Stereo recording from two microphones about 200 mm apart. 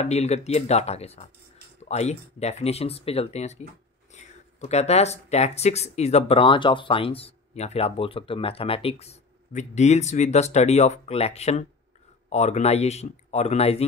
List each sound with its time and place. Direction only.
0.0 s speech: 35° left (ahead or behind)